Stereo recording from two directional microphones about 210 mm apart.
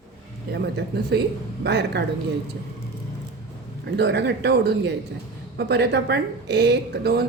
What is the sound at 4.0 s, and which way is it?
A woman's voice, 55° right (ahead or behind).